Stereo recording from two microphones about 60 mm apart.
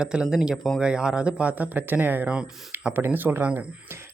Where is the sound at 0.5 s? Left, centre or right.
Centre.